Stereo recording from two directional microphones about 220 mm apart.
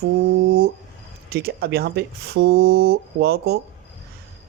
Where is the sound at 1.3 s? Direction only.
45° right (ahead or behind).